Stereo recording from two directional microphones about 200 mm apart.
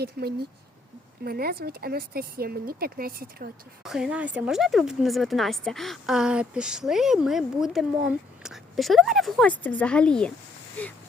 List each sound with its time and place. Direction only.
0.0 s speech: 50° right (ahead or behind)
3.8 s speech: 5° right (ahead or behind)